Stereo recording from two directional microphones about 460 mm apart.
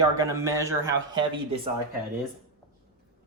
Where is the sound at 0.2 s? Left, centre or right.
Centre.